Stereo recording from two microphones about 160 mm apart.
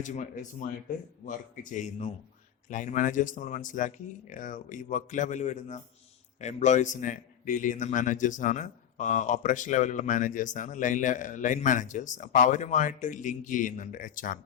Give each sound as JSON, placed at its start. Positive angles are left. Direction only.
{"t": 0.0, "sound": "a man's voice", "side_deg": 50}